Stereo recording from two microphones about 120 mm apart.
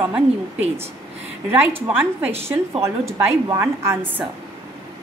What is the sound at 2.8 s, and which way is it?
A woman's voice, 25° right (ahead or behind).